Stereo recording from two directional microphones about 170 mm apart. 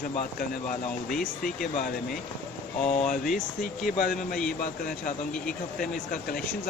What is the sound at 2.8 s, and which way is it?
Speech, 45° left (ahead or behind).